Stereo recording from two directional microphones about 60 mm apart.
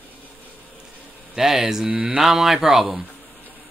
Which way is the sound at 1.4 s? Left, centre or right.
Centre.